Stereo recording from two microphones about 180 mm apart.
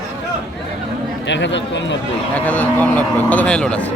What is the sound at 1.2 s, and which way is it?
Speech, 80° left.